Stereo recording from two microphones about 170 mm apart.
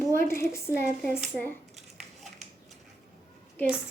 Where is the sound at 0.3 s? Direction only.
15° left (ahead or behind).